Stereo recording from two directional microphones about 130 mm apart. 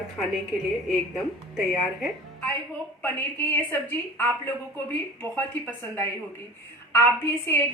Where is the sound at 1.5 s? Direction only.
Centre (ahead or behind).